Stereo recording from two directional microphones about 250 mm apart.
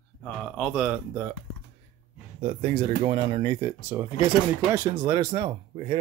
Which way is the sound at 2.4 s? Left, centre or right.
Right.